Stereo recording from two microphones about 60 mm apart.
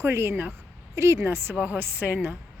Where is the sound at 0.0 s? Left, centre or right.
Right.